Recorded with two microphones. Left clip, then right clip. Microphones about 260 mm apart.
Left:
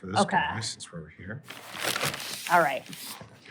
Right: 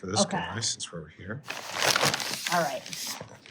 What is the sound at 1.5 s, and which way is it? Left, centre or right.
Shuffling cards, right.